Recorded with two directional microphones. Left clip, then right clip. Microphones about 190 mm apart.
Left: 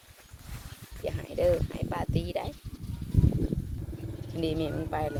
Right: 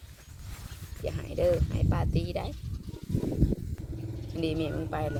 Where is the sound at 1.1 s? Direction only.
10° right (ahead or behind).